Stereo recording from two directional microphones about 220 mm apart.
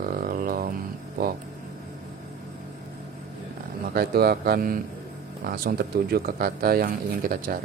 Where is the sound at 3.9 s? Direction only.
45° right (ahead or behind).